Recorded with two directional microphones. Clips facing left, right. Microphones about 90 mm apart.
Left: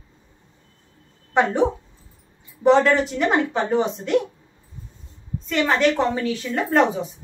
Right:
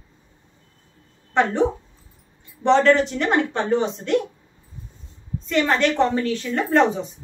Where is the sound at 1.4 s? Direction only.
15° left (ahead or behind).